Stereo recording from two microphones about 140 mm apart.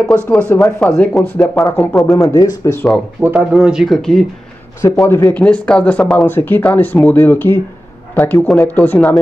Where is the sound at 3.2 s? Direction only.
10° right (ahead or behind).